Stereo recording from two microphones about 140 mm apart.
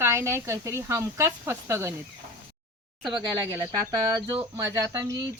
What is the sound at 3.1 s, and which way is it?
Speech, 25° right (ahead or behind).